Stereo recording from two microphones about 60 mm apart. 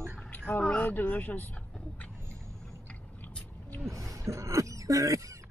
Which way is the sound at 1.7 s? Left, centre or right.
Centre.